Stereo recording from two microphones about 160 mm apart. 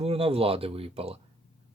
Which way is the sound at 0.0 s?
35° right (ahead or behind).